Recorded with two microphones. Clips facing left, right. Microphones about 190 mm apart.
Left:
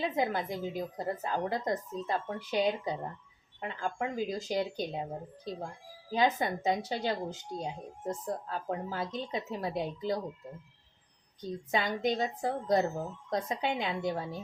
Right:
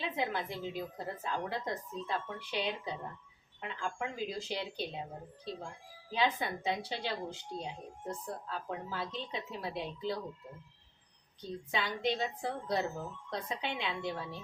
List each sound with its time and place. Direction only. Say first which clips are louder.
0.0 s a woman's voice: left 5 dB; 45° left (ahead or behind)
6.1 s a woman's voice: left 4 dB; 45° left (ahead or behind)
11.7 s a woman's voice: left 4 dB; 45° left (ahead or behind)